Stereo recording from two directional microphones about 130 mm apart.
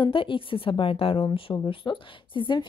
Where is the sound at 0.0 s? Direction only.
40° left (ahead or behind).